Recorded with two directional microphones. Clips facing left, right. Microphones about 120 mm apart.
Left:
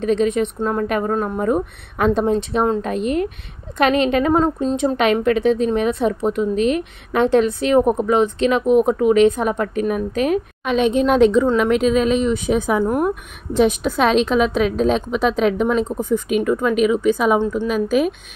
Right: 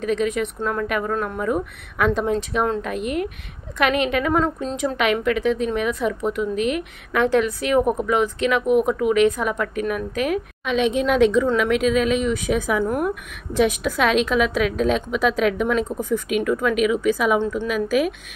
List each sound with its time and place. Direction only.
0.0 s a woman's voice: 30° left (ahead or behind)